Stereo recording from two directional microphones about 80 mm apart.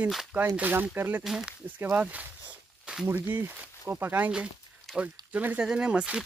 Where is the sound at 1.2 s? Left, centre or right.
Centre.